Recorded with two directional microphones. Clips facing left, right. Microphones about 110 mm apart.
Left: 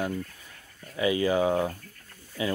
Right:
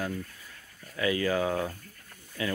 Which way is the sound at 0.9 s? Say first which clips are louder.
Left 3 dB; 20° left (ahead or behind).